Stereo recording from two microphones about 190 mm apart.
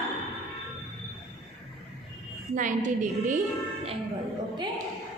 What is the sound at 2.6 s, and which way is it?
Speech, 40° right (ahead or behind).